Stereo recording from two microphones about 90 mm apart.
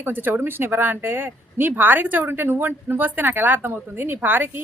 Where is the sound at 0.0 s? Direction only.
20° right (ahead or behind).